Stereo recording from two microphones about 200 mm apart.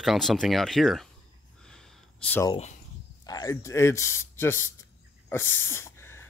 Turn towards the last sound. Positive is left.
turn(degrees=10)  # may be behind; listen again after turning